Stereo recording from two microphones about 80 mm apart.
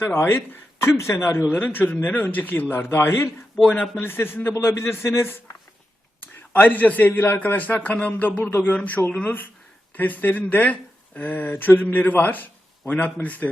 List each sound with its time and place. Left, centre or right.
0.0 s speech: left
3.6 s speech: centre
4.0 s a man's voice: left
6.5 s speech: left
8.7 s speech: centre